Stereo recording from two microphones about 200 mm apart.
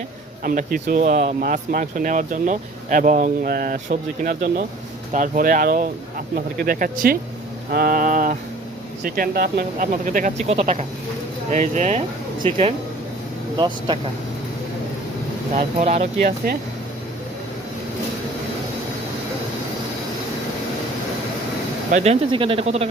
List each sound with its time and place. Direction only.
0.4 s speech: 45° right (ahead or behind); by 14.0 s 25° right (ahead or behind)
15.5 s speech: 35° right (ahead or behind)
21.9 s speech: 30° right (ahead or behind)